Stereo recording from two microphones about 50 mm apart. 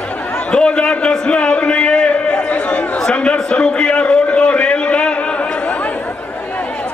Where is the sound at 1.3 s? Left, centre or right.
Left.